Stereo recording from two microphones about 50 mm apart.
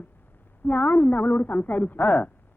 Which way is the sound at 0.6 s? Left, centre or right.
Left.